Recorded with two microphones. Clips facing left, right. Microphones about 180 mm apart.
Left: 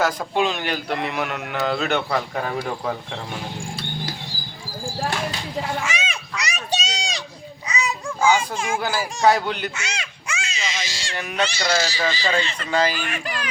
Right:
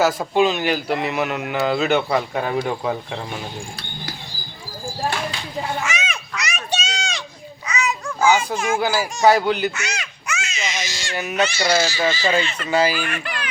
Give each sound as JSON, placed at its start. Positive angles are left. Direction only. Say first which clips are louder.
{"t": 0.0, "sound": "a man's voice", "louder": "right 4 dB", "side_deg": -5}
{"t": 5.8, "sound": "children playing", "louder": "right 1 dB", "side_deg": 30}
{"t": 7.7, "sound": "babbling", "louder": "right 2 dB", "side_deg": 35}
{"t": 8.4, "sound": "speech", "louder": "right 3 dB", "side_deg": 30}
{"t": 8.8, "sound": "a man's voice", "louder": "right 2 dB", "side_deg": -5}
{"t": 9.7, "sound": "baby cry", "louder": "right 2 dB", "side_deg": 30}
{"t": 11.1, "sound": "a man's voice", "louder": "right 3 dB", "side_deg": -5}